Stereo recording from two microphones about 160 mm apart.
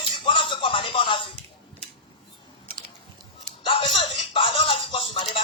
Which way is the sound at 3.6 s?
30° left (ahead or behind).